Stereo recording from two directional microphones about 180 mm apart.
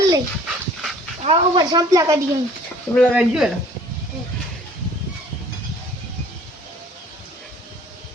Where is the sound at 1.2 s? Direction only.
30° right (ahead or behind).